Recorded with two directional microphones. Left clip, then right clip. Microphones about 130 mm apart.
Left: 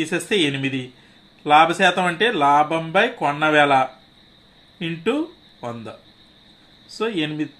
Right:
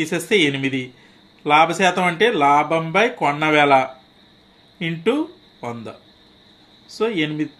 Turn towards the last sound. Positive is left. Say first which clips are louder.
# right 2 dB
turn(degrees=-20)  # may be behind; listen again after turning